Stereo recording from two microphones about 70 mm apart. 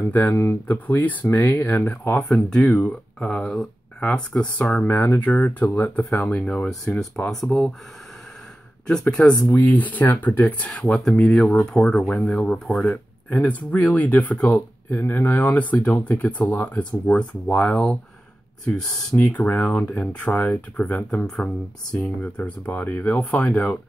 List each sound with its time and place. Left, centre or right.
0.2 s speech: left
2.2 s speech: centre
4.8 s speech: left; by 7.7 s centre
8.8 s speech: centre
9.6 s speech: left
10.7 s speech: centre
12.8 s speech: left
19.1 s speech: left
22.0 s speech: left